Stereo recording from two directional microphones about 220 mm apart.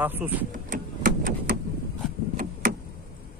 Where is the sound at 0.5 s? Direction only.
35° right (ahead or behind).